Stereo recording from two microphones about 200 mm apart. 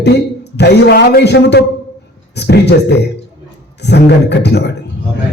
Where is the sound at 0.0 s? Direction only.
55° left (ahead or behind).